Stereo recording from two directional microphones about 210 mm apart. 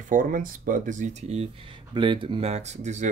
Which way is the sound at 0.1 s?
40° right (ahead or behind).